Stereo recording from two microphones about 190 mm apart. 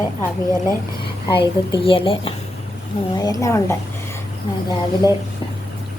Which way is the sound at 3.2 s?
20° left (ahead or behind).